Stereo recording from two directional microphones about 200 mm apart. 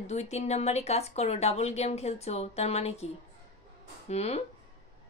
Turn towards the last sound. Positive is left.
turn(degrees=30)  # may be behind; listen again after turning